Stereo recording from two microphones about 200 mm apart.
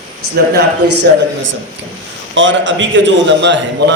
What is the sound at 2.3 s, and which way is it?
A man's voice, 70° right (ahead or behind).